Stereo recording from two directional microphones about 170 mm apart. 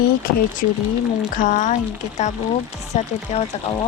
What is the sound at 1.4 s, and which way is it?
Speech, 50° left (ahead or behind).